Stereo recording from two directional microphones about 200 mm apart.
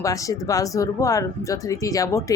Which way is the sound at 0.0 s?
15° left (ahead or behind).